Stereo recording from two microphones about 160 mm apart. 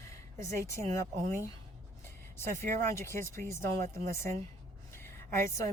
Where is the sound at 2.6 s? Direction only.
60° right (ahead or behind).